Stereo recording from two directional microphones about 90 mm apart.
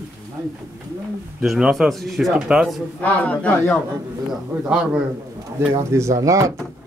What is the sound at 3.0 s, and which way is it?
Speech, 15° left (ahead or behind).